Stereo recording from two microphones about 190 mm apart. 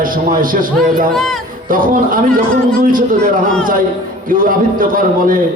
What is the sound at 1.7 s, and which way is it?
A man's voice, 45° right (ahead or behind).